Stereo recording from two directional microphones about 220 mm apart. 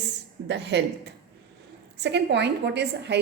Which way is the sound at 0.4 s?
50° right (ahead or behind).